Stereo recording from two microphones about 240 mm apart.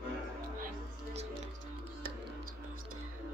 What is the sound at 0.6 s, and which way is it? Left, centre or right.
Music, right.